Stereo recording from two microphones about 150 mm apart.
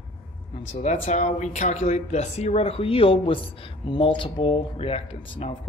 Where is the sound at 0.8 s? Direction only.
50° left (ahead or behind).